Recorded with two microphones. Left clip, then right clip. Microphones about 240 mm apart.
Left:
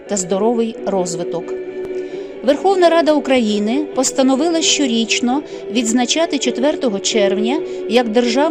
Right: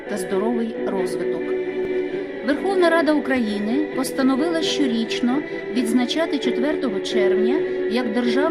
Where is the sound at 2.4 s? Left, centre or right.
Left.